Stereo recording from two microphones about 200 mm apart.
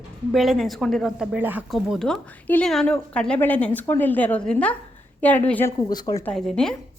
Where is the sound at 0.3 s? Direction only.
Centre (ahead or behind).